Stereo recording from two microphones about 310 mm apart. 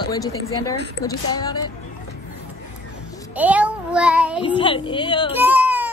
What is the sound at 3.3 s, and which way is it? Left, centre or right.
Child singing, centre.